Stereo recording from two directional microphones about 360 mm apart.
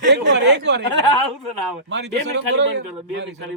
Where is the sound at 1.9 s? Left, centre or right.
Right.